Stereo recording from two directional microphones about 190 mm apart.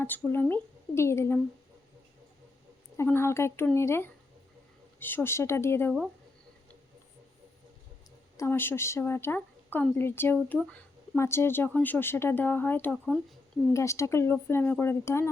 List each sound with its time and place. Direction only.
0.0 s speech: 10° left (ahead or behind)
3.0 s speech: 15° left (ahead or behind)
8.4 s speech: 10° left (ahead or behind)